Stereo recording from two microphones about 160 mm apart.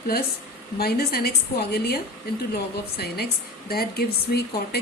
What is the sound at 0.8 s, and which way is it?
A woman's voice, 75° left (ahead or behind).